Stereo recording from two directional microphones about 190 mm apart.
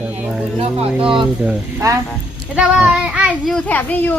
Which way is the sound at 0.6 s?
25° right (ahead or behind).